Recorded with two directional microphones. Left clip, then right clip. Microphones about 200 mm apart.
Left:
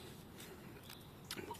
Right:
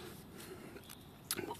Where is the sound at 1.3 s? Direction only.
50° right (ahead or behind).